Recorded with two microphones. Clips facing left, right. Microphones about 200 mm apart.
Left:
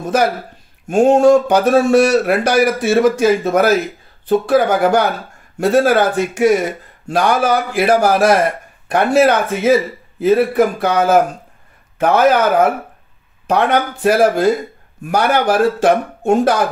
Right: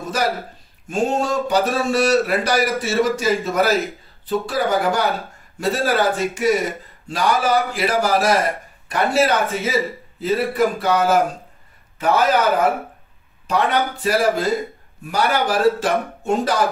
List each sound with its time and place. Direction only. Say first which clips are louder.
0.8 s a man's voice: left 11 dB; 55° left (ahead or behind)